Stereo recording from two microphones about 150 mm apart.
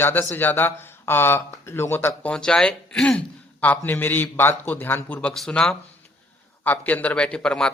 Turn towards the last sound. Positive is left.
turn(degrees=5)  # may be behind; listen again after turning